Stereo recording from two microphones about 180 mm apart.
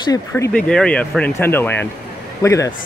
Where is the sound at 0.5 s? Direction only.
5° left (ahead or behind).